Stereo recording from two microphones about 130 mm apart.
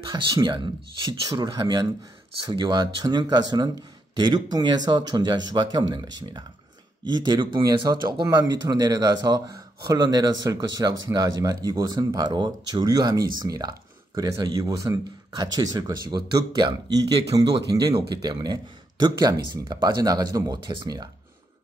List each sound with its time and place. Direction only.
0.0 s speech: 35° right (ahead or behind)